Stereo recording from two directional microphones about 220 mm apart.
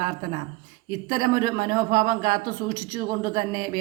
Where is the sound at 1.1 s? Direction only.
40° right (ahead or behind).